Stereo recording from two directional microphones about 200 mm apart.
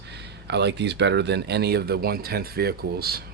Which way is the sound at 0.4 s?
55° right (ahead or behind).